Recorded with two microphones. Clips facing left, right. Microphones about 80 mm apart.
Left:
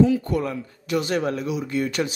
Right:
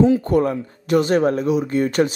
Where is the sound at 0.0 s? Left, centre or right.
Right.